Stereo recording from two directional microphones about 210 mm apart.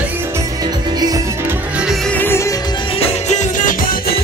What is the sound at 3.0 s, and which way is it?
Music, 35° left (ahead or behind).